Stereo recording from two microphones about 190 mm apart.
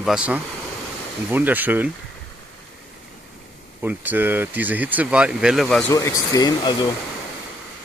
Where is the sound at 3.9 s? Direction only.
10° right (ahead or behind).